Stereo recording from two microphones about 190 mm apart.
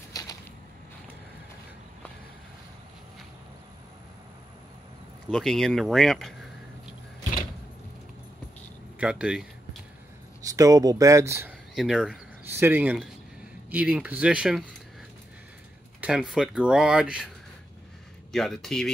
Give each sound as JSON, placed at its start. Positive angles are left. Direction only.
{"t": 0.2, "sound": "a sound", "side_deg": 20}
{"t": 5.3, "sound": "speech", "side_deg": 0}
{"t": 8.9, "sound": "speech", "side_deg": -5}
{"t": 10.4, "sound": "speech", "side_deg": -15}
{"t": 11.7, "sound": "speech", "side_deg": 0}
{"t": 12.4, "sound": "speech", "side_deg": -10}
{"t": 16.0, "sound": "speech", "side_deg": -5}
{"t": 18.3, "sound": "speech", "side_deg": 0}